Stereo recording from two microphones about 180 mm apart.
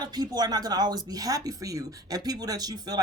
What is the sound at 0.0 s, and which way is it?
A man's voice, 20° right (ahead or behind).